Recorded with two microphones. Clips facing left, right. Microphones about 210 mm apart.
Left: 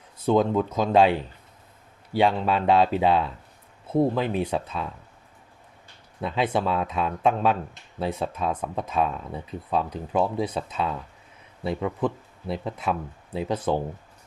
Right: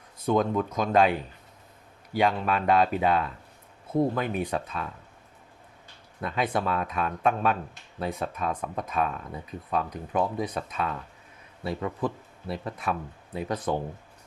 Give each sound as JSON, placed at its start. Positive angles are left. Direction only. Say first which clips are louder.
{"t": 0.3, "sound": "speech", "louder": "left 3 dB", "side_deg": 25}
{"t": 6.2, "sound": "speech", "louder": "left 3 dB", "side_deg": 25}